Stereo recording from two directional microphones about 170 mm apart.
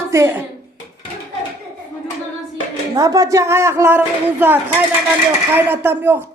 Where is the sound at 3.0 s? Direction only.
20° right (ahead or behind).